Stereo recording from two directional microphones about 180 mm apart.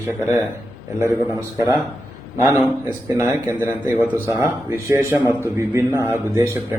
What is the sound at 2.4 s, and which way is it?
Speech, 15° right (ahead or behind).